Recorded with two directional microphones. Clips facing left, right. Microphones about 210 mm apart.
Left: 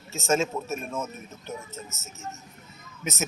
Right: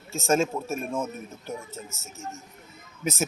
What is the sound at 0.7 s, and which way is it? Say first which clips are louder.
Speech: right 3 dB; 15° right (ahead or behind).